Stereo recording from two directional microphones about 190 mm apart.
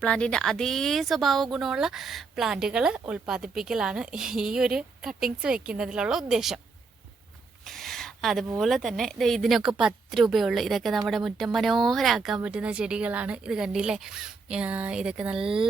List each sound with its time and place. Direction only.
0.0 s speech: 5° left (ahead or behind)
7.6 s a sound: centre (ahead or behind)
8.5 s speech: centre (ahead or behind)